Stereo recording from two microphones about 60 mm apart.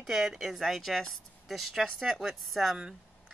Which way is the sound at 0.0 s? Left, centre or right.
Centre.